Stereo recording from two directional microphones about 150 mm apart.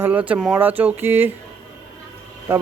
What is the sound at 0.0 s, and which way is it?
Speech, 10° right (ahead or behind).